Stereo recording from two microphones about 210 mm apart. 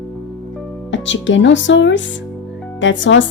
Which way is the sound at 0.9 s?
60° left (ahead or behind).